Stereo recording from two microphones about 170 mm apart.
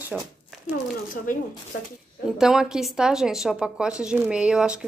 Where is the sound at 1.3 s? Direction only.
50° left (ahead or behind).